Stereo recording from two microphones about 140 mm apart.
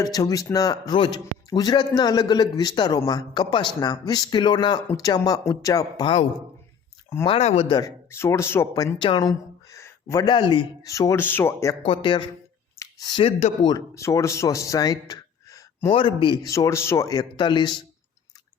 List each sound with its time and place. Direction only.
0.0 s speech: 25° left (ahead or behind)
7.3 s speech: 50° left (ahead or behind)
7.7 s speech: 25° left (ahead or behind)
9.0 s a sound: 30° left (ahead or behind)
10.2 s speech: 35° left (ahead or behind)
10.8 s speech: 25° left (ahead or behind)
11.8 s speech: 40° left (ahead or behind)
12.8 s a sound: 30° left (ahead or behind)
13.6 s speech: 30° left (ahead or behind)
13.9 s speech: 20° left (ahead or behind)
15.9 s speech: 40° left (ahead or behind)